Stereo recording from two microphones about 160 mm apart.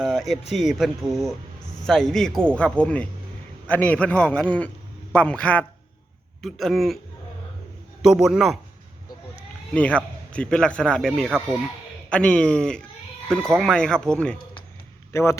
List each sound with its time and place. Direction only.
0.0 s a man's voice: centre (ahead or behind)
8.0 s speech: 5° right (ahead or behind)
9.7 s a man's voice: 10° left (ahead or behind)
15.1 s a man's voice: 15° left (ahead or behind)